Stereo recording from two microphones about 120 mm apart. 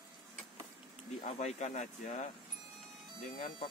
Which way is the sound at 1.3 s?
70° left (ahead or behind).